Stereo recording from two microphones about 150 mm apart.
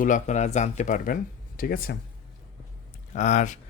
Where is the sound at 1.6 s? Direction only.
80° left.